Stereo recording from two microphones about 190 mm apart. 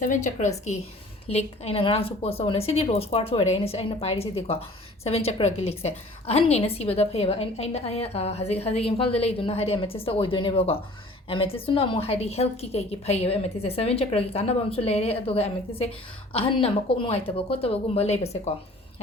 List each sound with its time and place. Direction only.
0.0 s a woman's voice: 40° left (ahead or behind)